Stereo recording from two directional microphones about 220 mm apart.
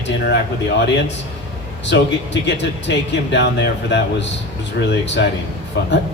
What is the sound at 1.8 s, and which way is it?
A man's voice, 55° left (ahead or behind).